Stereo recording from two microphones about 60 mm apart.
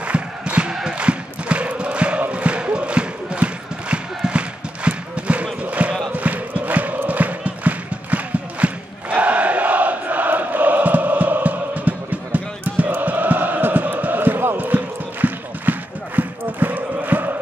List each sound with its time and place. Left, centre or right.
0.0 s music: right
0.9 s chant: centre
2.3 s battle cry: centre
4.2 s a sound: centre
6.1 s music: right
16.2 s a sound: right